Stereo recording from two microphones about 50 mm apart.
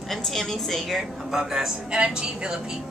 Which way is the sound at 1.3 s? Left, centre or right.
Centre.